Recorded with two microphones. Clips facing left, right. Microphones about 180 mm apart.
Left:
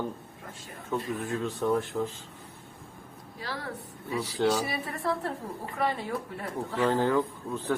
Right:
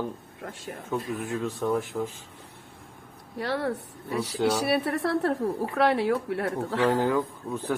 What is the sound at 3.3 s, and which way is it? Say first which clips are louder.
A woman's voice: right 9 dB; 65° right (ahead or behind).